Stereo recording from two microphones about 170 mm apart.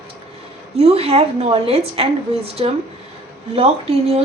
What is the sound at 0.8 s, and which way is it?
A woman's voice, 35° right (ahead or behind).